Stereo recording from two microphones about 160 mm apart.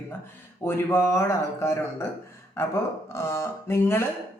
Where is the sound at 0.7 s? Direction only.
15° left (ahead or behind).